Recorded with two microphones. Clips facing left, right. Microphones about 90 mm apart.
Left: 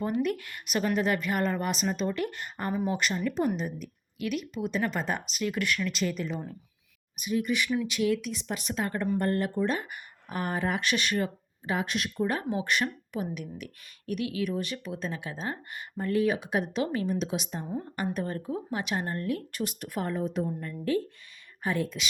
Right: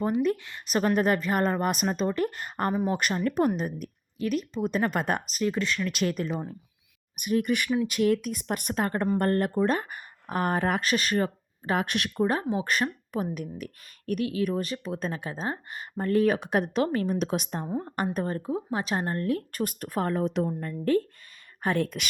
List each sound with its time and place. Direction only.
0.2 s speech: 25° right (ahead or behind)
0.7 s a woman's voice: 40° right (ahead or behind)
2.7 s speech: 25° right (ahead or behind)
3.2 s speech: 50° right (ahead or behind)
4.2 s a woman's voice: 35° right (ahead or behind)
5.9 s speech: 55° right (ahead or behind)
10.8 s speech: 40° right (ahead or behind); by 12.2 s 60° right (ahead or behind)
12.2 s speech: 30° right (ahead or behind)
12.6 s a woman's voice: 40° right (ahead or behind)
20.5 s speech: 40° right (ahead or behind)